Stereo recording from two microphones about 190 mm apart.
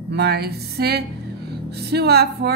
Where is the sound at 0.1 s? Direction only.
60° right (ahead or behind).